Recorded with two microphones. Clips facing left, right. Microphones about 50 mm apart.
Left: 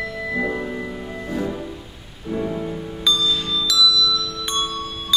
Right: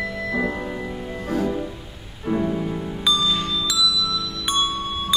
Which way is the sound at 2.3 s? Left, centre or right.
Centre.